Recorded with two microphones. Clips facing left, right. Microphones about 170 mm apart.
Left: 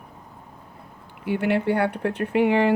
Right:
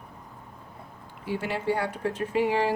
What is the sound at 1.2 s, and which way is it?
Speech, 65° left (ahead or behind).